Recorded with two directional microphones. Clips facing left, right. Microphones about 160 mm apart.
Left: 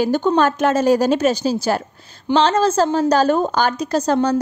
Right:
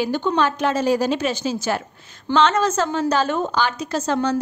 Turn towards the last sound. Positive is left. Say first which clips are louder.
# left 4 dB
turn(degrees=40)  # may be behind; listen again after turning